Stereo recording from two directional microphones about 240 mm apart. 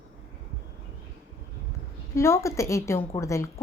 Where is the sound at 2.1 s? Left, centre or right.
Centre.